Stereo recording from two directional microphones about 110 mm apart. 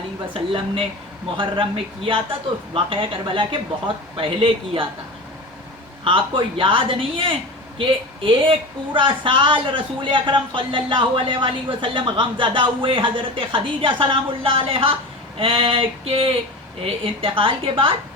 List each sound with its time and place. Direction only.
0.3 s a woman's voice: 55° right (ahead or behind)
6.1 s a woman's voice: 50° right (ahead or behind)